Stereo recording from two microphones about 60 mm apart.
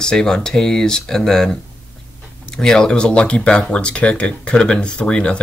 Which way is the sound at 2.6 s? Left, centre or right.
Centre.